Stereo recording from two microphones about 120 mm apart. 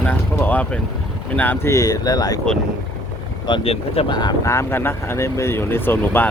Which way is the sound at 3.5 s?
50° left (ahead or behind).